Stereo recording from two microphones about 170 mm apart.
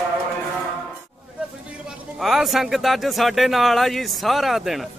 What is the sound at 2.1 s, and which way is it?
Speech, centre (ahead or behind).